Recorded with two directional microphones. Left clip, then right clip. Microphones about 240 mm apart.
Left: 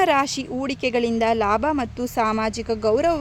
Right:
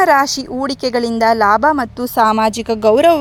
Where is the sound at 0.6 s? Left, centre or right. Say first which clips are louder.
Right 5 dB; centre.